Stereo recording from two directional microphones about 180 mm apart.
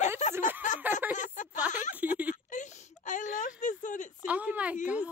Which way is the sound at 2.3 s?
45° left (ahead or behind).